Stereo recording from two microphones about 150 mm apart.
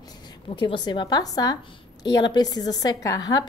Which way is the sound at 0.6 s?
30° left (ahead or behind).